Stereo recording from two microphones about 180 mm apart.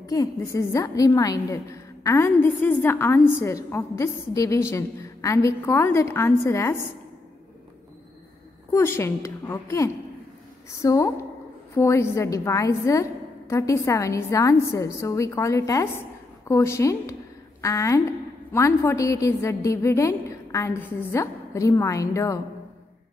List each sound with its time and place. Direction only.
0.0 s a woman's voice: 20° left (ahead or behind)
8.7 s a woman's voice: 15° left (ahead or behind)